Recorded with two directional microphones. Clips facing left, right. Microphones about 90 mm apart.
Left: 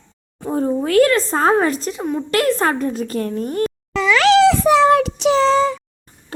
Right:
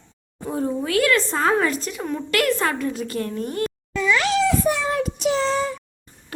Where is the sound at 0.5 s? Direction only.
35° left (ahead or behind).